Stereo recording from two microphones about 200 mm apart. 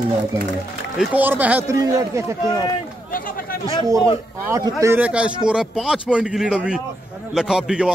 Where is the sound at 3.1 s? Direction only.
45° left (ahead or behind).